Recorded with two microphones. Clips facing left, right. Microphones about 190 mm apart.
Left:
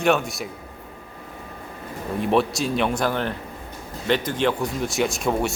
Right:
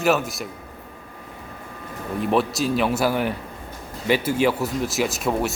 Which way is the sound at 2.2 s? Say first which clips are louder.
Even; centre (ahead or behind).